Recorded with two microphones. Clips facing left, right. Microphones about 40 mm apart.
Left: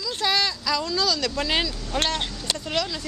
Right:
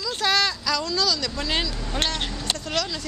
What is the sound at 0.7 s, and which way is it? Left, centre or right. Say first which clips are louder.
Speech: left 3 dB; left.